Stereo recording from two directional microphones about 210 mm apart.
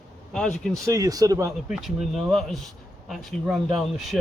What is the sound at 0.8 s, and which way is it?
Speech, 15° right (ahead or behind).